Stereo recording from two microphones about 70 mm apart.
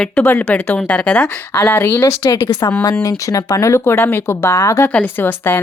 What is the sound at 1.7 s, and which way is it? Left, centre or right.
Speech, left.